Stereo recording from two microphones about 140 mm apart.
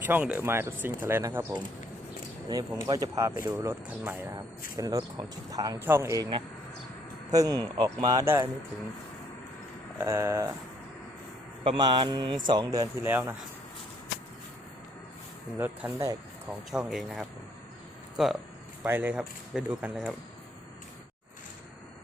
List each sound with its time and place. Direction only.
0.0 s speech: 15° right (ahead or behind)
2.8 s speech: 25° right (ahead or behind)
4.8 s speech: 25° right (ahead or behind)
5.8 s speech: 15° right (ahead or behind)
7.3 s speech: 25° right (ahead or behind)
10.0 s speech: 20° right (ahead or behind)
11.6 s speech: 35° right (ahead or behind)
13.0 s speech: 15° right (ahead or behind)
15.5 s speech: 15° right (ahead or behind)
16.5 s speech: 5° right (ahead or behind)
18.9 s speech: 15° right (ahead or behind)